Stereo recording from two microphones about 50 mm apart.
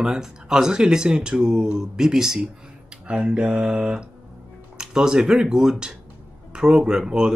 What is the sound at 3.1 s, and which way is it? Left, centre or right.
Mantra, centre.